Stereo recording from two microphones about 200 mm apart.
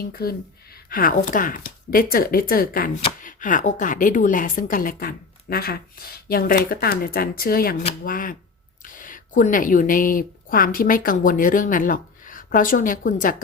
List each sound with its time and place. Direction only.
0.0 s a woman's voice: 50° left (ahead or behind)